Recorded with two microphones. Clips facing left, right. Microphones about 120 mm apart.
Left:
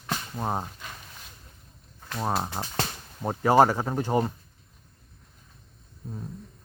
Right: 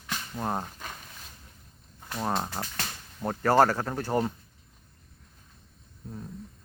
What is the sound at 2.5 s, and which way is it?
Speech, 25° left (ahead or behind).